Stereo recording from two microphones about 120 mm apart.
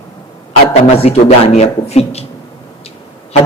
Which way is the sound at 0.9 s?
55° left (ahead or behind).